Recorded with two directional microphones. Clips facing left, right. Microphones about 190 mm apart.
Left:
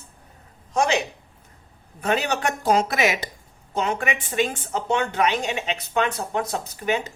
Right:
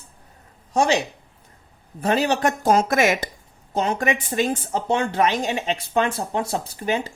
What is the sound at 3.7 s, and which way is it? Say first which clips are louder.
Speech: right 3 dB; 35° right (ahead or behind).